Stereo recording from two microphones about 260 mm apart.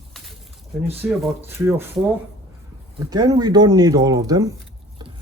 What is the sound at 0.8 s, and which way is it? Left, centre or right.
Speech, centre.